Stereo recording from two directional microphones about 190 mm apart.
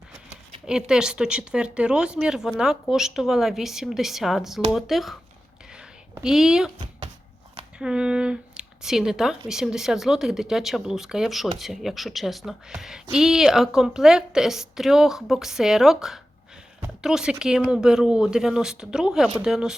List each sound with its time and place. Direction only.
0.7 s a woman's voice: 5° right (ahead or behind)
5.7 s a sound: 5° right (ahead or behind)
7.8 s a woman's voice: 5° right (ahead or behind)